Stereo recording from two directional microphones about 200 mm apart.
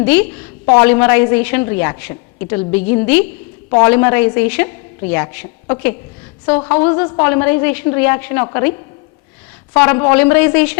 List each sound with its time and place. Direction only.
0.0 s a woman's voice: 10° left (ahead or behind)
9.7 s a woman's voice: 10° left (ahead or behind)